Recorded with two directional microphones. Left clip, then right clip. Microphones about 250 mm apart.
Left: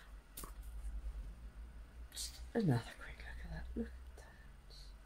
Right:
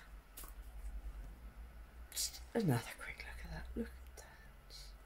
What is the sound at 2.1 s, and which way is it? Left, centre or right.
Whispering, centre.